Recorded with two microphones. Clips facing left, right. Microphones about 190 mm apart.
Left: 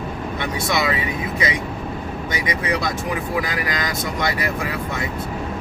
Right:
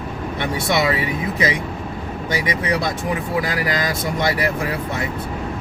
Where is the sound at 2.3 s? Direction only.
30° right (ahead or behind).